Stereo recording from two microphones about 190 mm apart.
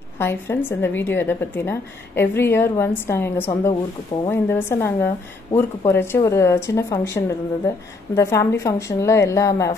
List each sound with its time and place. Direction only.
0.2 s a woman's voice: 10° left (ahead or behind)